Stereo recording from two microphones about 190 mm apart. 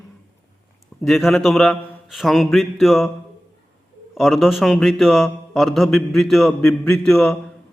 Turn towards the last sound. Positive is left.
turn(degrees=5)  # may be behind; listen again after turning